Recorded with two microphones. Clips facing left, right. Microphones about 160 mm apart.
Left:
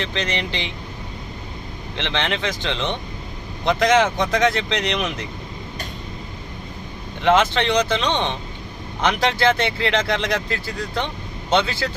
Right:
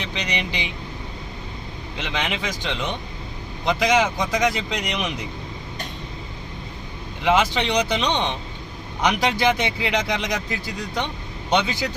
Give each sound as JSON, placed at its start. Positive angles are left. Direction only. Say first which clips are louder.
{"t": 0.0, "sound": "speech", "louder": "left 3 dB", "side_deg": -15}
{"t": 2.0, "sound": "speech", "louder": "left 3 dB", "side_deg": -10}
{"t": 7.2, "sound": "speech", "louder": "left 3 dB", "side_deg": -10}